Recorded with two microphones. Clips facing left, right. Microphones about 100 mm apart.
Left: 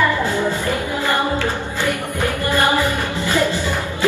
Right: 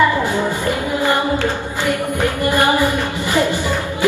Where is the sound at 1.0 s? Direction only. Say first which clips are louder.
Right 3 dB; 15° right (ahead or behind).